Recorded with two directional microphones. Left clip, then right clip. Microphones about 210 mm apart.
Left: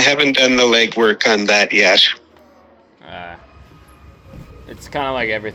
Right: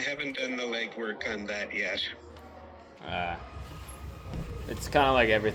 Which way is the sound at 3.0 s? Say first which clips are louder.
Left 1 dB; 15° left (ahead or behind).